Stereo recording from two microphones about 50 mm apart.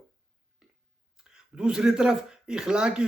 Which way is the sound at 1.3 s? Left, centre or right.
Centre.